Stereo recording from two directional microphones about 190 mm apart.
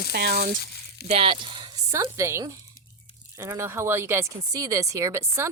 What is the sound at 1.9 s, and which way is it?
Speech, 15° right (ahead or behind).